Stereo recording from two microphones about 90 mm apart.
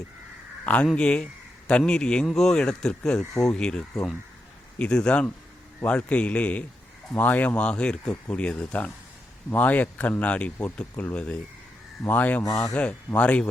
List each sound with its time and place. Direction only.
0.6 s a man's voice: 15° left (ahead or behind)
12.4 s speech: 40° left (ahead or behind)
12.7 s speech: 15° left (ahead or behind)